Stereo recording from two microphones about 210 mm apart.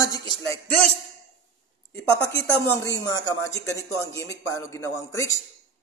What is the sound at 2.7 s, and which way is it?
Speech, 15° left (ahead or behind).